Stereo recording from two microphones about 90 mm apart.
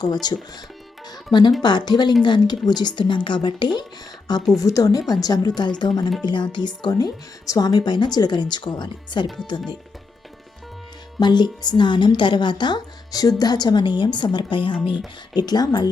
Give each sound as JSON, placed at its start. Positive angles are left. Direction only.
{"t": 0.0, "sound": "a woman's voice", "side_deg": 50}
{"t": 4.5, "sound": "a woman's voice", "side_deg": 40}
{"t": 9.2, "sound": "speech", "side_deg": 0}
{"t": 11.2, "sound": "a woman's voice", "side_deg": 55}
{"t": 15.4, "sound": "a woman's voice", "side_deg": 50}